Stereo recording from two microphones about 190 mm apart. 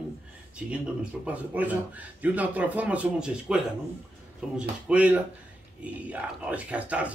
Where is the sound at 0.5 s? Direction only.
5° right (ahead or behind).